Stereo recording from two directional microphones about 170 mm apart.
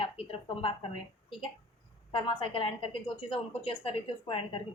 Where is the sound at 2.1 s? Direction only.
30° left (ahead or behind).